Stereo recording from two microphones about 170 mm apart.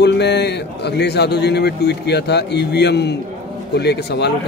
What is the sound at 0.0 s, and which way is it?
A man's voice, 80° left.